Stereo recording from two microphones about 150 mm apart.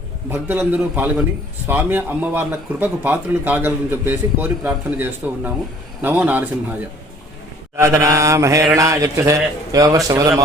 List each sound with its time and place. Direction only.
0.3 s speech: 15° right (ahead or behind)
7.8 s mantra: 20° right (ahead or behind)